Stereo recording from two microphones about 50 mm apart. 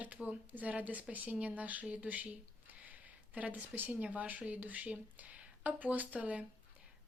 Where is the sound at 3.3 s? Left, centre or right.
Right.